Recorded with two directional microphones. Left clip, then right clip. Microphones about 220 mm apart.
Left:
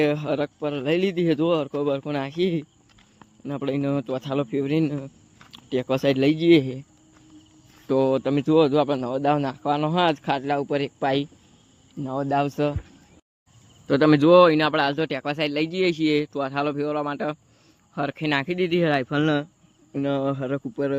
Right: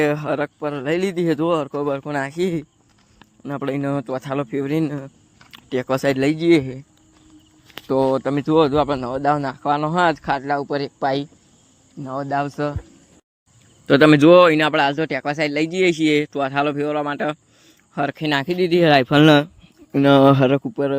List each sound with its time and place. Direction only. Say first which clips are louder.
0.0 s speech: right 3 dB; 5° right (ahead or behind)
7.9 s speech: right 3 dB; 5° right (ahead or behind); by 12.7 s 10° left (ahead or behind)
13.8 s a man's voice: right 6 dB; 15° right (ahead or behind); by 20.6 s 45° right (ahead or behind)
20.6 s a man's voice: right 5 dB; 20° right (ahead or behind)